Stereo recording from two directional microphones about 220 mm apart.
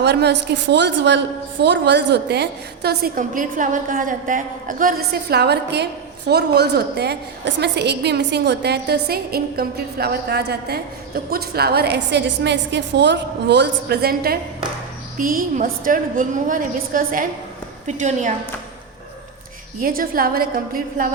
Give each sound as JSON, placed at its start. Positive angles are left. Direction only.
{"t": 0.0, "sound": "a woman's voice", "side_deg": -50}
{"t": 19.8, "sound": "a woman's voice", "side_deg": -40}